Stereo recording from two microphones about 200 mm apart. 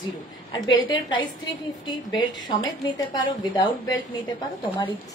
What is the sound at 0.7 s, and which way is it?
A woman's voice, 25° left (ahead or behind).